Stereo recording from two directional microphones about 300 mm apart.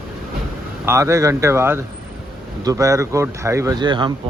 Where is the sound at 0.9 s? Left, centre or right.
Centre.